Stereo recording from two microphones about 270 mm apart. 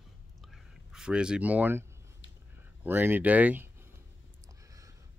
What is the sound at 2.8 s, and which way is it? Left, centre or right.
Speech, centre.